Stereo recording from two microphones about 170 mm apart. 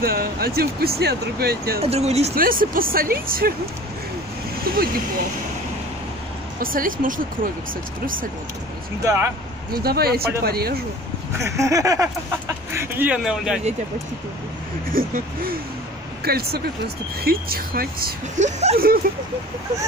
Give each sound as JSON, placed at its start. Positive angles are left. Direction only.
{"t": 0.0, "sound": "speech", "side_deg": -65}
{"t": 1.8, "sound": "speech", "side_deg": -40}
{"t": 2.3, "sound": "speech", "side_deg": -55}
{"t": 4.7, "sound": "speech", "side_deg": -60}
{"t": 6.6, "sound": "speech", "side_deg": -55}
{"t": 9.0, "sound": "speech", "side_deg": -15}
{"t": 9.7, "sound": "speech", "side_deg": -65}
{"t": 11.3, "sound": "speech", "side_deg": -15}
{"t": 14.9, "sound": "speech", "side_deg": -55}
{"t": 18.4, "sound": "speech", "side_deg": -40}
{"t": 19.0, "sound": "speech", "side_deg": -60}